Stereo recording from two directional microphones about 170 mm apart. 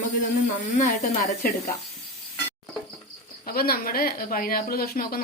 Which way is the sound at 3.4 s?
60° left (ahead or behind).